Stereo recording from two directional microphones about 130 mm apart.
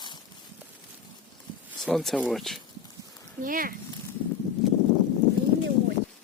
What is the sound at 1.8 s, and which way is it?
Speech, centre (ahead or behind).